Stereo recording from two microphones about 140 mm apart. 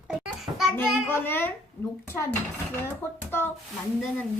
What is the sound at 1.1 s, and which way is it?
A child's voice, 15° left (ahead or behind).